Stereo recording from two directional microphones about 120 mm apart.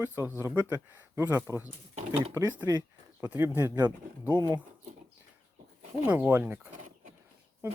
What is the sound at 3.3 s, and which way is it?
Speech, 20° right (ahead or behind).